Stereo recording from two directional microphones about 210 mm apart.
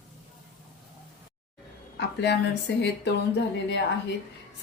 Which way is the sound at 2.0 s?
55° left (ahead or behind).